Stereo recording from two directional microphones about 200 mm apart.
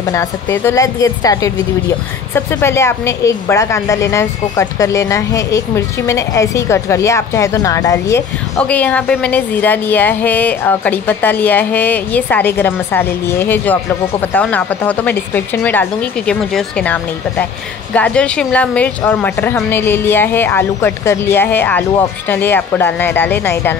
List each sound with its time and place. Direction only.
0.0 s a woman's voice: 15° left (ahead or behind)